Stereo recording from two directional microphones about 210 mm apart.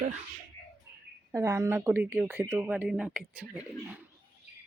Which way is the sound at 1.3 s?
15° right (ahead or behind).